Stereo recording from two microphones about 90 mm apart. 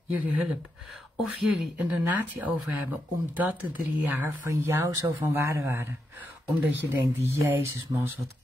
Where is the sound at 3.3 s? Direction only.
20° right (ahead or behind).